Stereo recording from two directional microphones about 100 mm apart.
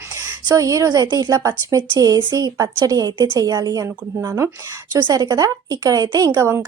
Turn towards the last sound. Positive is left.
turn(degrees=-30)  # may be behind; listen again after turning